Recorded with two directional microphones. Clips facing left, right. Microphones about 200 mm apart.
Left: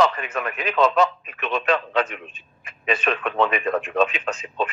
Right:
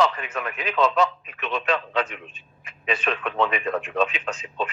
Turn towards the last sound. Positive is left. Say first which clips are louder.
# left 3 dB
turn(degrees=50)  # may be behind; listen again after turning